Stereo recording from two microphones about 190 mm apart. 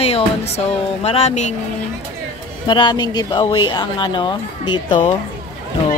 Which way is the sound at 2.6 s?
25° left (ahead or behind).